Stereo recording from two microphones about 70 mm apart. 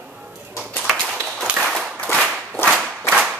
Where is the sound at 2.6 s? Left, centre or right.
Centre.